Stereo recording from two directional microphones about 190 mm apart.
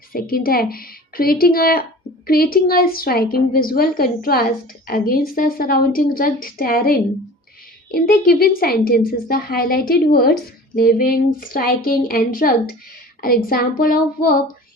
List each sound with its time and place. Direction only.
0.1 s a woman's voice: 50° left (ahead or behind)